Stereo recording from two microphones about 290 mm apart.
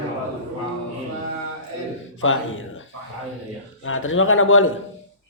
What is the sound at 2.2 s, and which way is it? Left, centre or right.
Speech, left.